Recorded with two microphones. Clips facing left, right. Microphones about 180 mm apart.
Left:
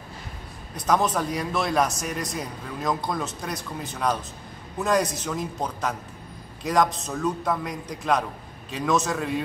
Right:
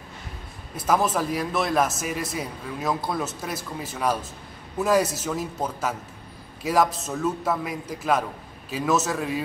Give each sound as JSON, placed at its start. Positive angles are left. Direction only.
{"t": 0.7, "sound": "speech", "side_deg": -5}